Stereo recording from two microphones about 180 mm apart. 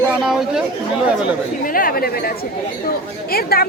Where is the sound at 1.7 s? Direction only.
55° left (ahead or behind).